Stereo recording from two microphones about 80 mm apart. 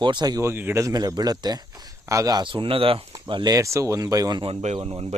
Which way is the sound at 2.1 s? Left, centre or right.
Right.